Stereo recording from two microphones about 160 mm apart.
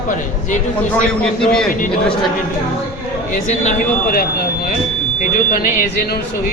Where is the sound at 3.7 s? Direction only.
65° left (ahead or behind).